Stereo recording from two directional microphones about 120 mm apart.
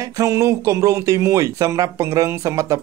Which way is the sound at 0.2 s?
25° right (ahead or behind).